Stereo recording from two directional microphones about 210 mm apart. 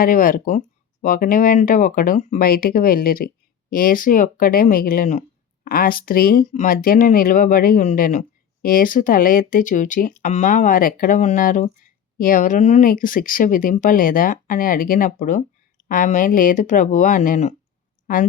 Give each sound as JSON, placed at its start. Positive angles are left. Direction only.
{"t": 0.0, "sound": "a woman's voice", "side_deg": 40}